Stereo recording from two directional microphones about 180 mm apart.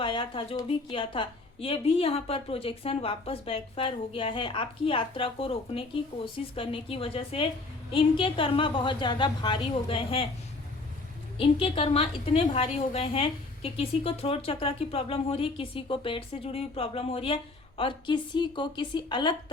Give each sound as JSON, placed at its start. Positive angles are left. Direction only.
{"t": 0.0, "sound": "a woman's voice", "side_deg": 30}
{"t": 11.3, "sound": "a woman's voice", "side_deg": 30}